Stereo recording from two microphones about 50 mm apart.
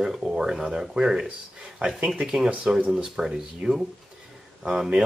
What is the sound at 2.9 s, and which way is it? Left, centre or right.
Speech, centre.